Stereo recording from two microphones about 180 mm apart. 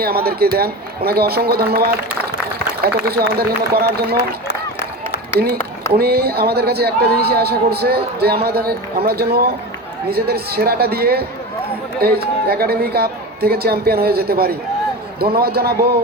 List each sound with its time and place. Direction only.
0.0 s a man's voice: 60° right (ahead or behind)
6.0 s a man's voice: 60° right (ahead or behind)